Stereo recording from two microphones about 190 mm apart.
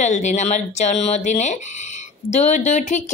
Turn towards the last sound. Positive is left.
turn(degrees=40)  # may be behind; listen again after turning